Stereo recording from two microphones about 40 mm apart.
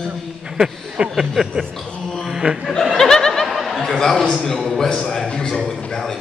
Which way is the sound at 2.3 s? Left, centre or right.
Centre.